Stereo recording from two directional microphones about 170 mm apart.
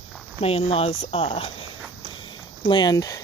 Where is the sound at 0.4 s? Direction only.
35° left (ahead or behind).